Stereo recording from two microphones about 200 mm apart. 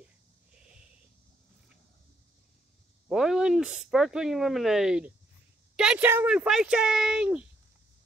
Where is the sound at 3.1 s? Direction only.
Centre (ahead or behind).